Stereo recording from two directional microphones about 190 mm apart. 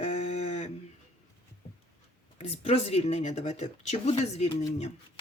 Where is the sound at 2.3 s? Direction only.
35° left (ahead or behind).